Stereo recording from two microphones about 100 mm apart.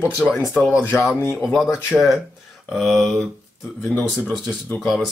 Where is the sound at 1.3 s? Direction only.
Centre (ahead or behind).